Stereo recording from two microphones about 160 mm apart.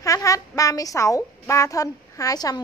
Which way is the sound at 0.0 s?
20° left (ahead or behind).